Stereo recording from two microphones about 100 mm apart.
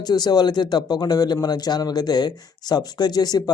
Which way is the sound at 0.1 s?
45° left (ahead or behind).